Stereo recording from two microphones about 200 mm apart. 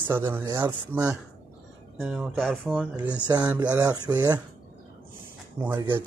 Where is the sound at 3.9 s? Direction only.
20° right (ahead or behind).